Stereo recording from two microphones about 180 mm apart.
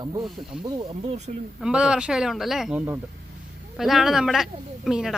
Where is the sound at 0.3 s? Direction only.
Centre (ahead or behind).